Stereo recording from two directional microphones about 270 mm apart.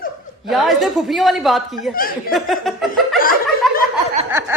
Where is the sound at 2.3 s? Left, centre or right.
Centre.